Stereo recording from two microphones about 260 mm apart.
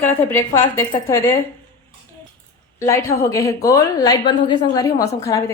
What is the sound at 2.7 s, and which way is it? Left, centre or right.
A woman's voice, centre.